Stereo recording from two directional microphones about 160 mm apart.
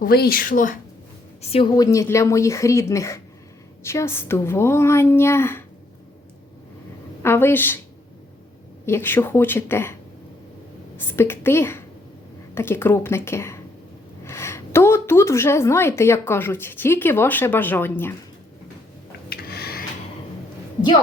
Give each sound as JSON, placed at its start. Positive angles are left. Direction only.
{"t": 0.0, "sound": "a woman's voice", "side_deg": 70}
{"t": 1.4, "sound": "a woman's voice", "side_deg": 35}
{"t": 1.7, "sound": "a woman's voice", "side_deg": 20}
{"t": 7.2, "sound": "a woman's voice", "side_deg": 15}
{"t": 8.9, "sound": "a woman's voice", "side_deg": 15}
{"t": 10.9, "sound": "a woman's voice", "side_deg": 15}
{"t": 19.3, "sound": "a sound", "side_deg": 75}